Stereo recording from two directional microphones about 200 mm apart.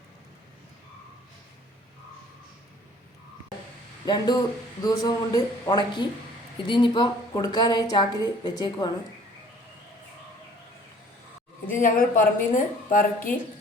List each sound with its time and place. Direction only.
4.0 s a woman's voice: 20° left (ahead or behind)
11.7 s a woman's voice: 40° left (ahead or behind)